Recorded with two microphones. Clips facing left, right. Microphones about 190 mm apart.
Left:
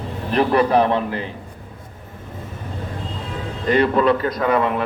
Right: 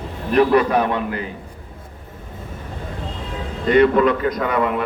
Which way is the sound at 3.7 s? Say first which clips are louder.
Right 2 dB; 30° left (ahead or behind).